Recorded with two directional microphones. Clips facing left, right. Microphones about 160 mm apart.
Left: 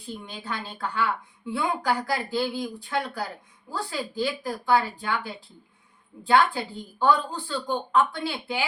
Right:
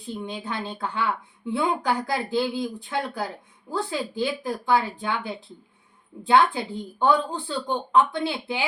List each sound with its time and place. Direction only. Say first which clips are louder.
0.2 s speech: right 4 dB; 20° right (ahead or behind)